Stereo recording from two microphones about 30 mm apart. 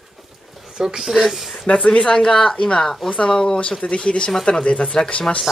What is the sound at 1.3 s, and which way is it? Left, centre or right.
Speech, centre.